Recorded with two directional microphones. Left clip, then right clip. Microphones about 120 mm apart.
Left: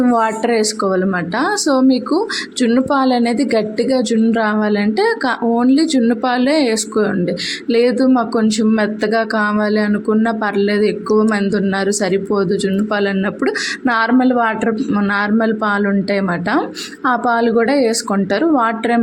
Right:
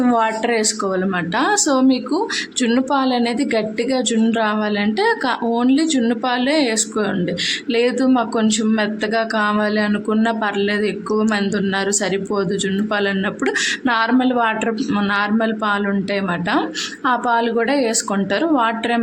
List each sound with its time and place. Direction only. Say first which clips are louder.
0.0 s a woman's voice: left 2 dB; 20° left (ahead or behind)
10.4 s speech: left 4 dB; 30° left (ahead or behind)
13.8 s a woman's voice: left 5 dB; 35° left (ahead or behind)